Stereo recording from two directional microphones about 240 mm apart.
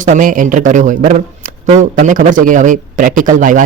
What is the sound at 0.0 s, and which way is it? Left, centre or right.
A man's voice, right.